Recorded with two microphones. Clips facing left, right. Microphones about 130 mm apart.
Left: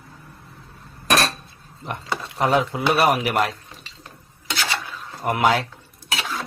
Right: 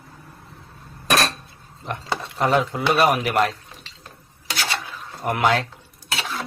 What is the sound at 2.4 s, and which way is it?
Speech, centre (ahead or behind).